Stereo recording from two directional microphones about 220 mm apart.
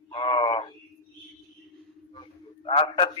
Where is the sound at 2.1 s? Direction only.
25° left (ahead or behind).